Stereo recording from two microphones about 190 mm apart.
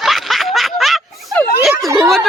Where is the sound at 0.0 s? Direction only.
Centre (ahead or behind).